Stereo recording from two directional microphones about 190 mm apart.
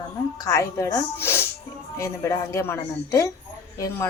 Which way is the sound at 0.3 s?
15° left (ahead or behind).